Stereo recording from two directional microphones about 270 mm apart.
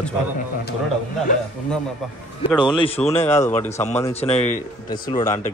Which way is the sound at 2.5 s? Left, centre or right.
Centre.